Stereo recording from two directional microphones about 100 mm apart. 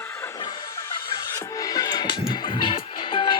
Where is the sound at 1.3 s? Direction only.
35° left (ahead or behind); by 3.4 s 55° left (ahead or behind).